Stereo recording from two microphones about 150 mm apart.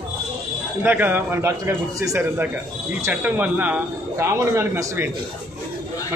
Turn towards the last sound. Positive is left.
turn(degrees=-15)  # may be behind; listen again after turning